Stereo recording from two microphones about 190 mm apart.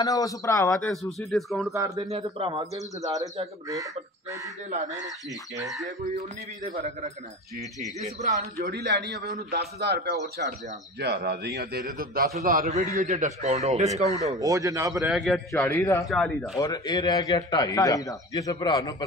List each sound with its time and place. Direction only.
0.0 s a man's voice: 20° left (ahead or behind)
0.8 s speech: centre (ahead or behind)
2.0 s a man's voice: 30° right (ahead or behind)
3.0 s a man's voice: 20° right (ahead or behind)
8.4 s a man's voice: 60° right (ahead or behind); by 14.0 s 35° right (ahead or behind)
14.3 s a man's voice: 15° right (ahead or behind)
15.0 s speech: centre (ahead or behind)
15.8 s a man's voice: 15° left (ahead or behind)
16.1 s speech: centre (ahead or behind)
16.5 s a man's voice: 20° left (ahead or behind)